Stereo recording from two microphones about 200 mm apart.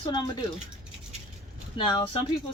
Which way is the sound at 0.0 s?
25° left (ahead or behind).